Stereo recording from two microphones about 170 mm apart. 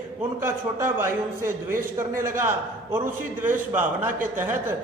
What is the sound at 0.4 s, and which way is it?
A man's voice, 15° right (ahead or behind).